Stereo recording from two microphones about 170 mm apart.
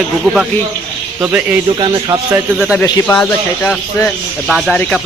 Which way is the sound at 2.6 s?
Centre (ahead or behind).